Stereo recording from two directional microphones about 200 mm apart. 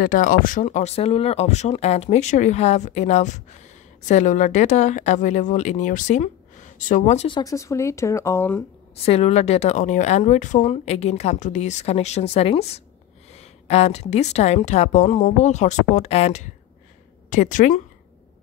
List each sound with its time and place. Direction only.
0.0 s speech: 40° left (ahead or behind)
7.3 s speech: 15° left (ahead or behind)
8.9 s speech: 30° left (ahead or behind)